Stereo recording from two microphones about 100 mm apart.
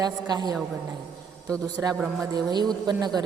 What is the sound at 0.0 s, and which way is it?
Speech, 45° right (ahead or behind).